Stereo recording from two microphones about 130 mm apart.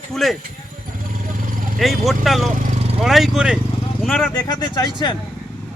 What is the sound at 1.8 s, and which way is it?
Speech, centre (ahead or behind).